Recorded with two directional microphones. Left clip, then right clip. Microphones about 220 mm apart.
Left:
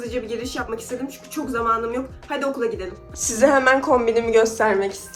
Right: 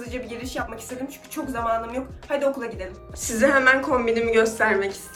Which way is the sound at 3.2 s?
20° left (ahead or behind).